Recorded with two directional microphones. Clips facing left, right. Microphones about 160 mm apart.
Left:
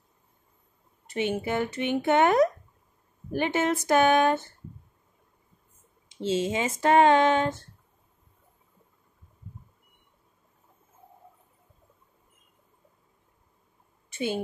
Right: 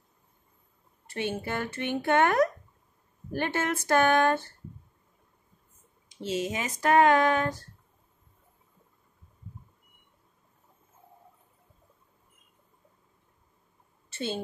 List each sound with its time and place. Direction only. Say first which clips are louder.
1.0 s speech: left 4 dB; 20° left (ahead or behind)
6.0 s speech: left 4 dB; 25° left (ahead or behind)
14.1 s a woman's voice: left 4 dB; 10° left (ahead or behind)